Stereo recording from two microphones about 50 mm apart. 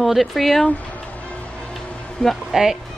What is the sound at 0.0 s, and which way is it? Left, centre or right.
Speech, centre.